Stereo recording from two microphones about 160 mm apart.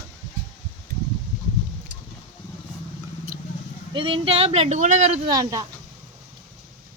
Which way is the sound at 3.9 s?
35° right (ahead or behind).